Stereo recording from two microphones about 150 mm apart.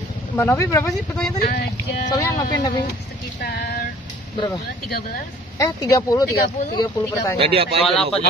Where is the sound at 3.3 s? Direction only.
90° left.